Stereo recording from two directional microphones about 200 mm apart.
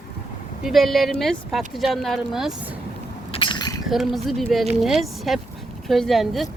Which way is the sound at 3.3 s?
25° left (ahead or behind).